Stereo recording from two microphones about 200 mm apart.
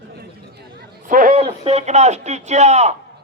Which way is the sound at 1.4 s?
30° right (ahead or behind).